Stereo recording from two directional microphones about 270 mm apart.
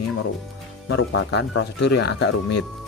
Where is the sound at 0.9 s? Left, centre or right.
Left.